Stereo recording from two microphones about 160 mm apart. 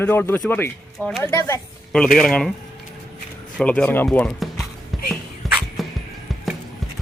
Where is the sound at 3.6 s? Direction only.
10° left (ahead or behind).